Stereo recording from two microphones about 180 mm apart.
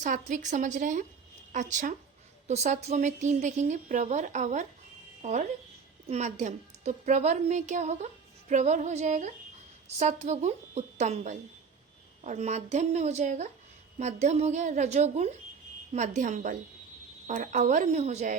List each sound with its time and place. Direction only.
0.0 s a woman's voice: 45° right (ahead or behind)